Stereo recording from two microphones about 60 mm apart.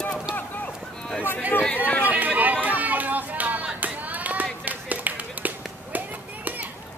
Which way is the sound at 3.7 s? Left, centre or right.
Right.